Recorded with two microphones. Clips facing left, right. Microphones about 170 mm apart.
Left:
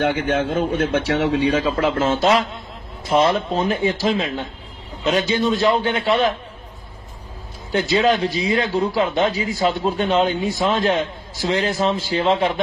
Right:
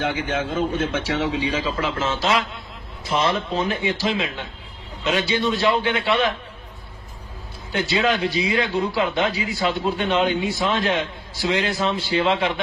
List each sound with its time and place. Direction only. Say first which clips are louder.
0.0 s a man's voice: left 5 dB; 65° left (ahead or behind); by 6.3 s 45° left (ahead or behind)
7.7 s a man's voice: left 4 dB; 40° left (ahead or behind)